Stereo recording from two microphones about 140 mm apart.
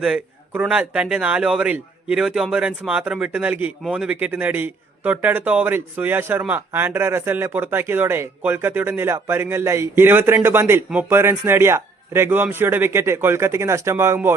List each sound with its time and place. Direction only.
0.0 s speech: 5° right (ahead or behind)